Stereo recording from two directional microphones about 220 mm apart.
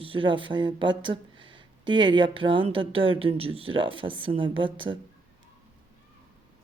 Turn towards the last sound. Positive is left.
turn(degrees=-20)  # may be behind; listen again after turning